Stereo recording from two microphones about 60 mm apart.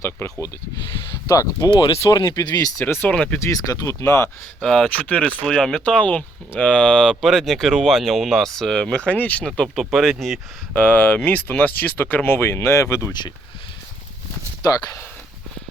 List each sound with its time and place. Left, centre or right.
0.0 s speech: left
1.3 s speech: left
2.3 s speech: left
2.8 s speech: left
3.1 s speech: centre
3.5 s speech: left
4.6 s speech: centre
4.9 s speech: left
5.5 s speech: centre
9.0 s speech: left
9.7 s speech: centre
10.8 s speech: left